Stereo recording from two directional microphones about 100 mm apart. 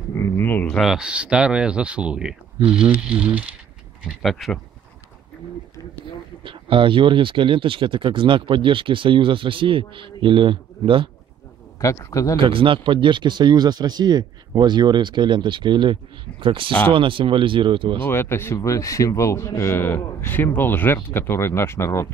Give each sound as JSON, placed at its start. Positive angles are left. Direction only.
{"t": 0.1, "sound": "a sound", "side_deg": 25}
{"t": 0.7, "sound": "speech", "side_deg": 0}
{"t": 0.9, "sound": "speech", "side_deg": -10}
{"t": 6.4, "sound": "speech", "side_deg": -60}
{"t": 11.8, "sound": "speech", "side_deg": 30}
{"t": 12.4, "sound": "speech", "side_deg": -60}
{"t": 18.0, "sound": "a man's voice", "side_deg": 25}